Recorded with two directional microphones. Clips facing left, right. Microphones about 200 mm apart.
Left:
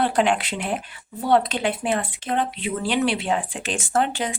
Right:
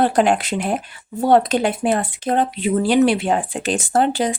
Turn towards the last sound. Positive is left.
turn(degrees=-40)  # may be behind; listen again after turning